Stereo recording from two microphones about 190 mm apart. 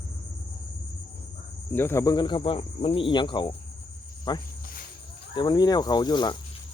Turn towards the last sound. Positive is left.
turn(degrees=25)  # may be behind; listen again after turning